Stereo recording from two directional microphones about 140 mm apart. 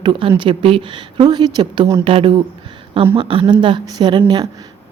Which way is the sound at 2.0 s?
40° right (ahead or behind).